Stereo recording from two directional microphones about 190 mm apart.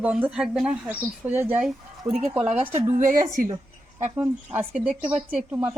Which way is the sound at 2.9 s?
45° right (ahead or behind).